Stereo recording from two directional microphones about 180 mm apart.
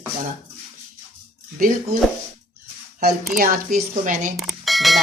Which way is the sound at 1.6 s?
50° right (ahead or behind).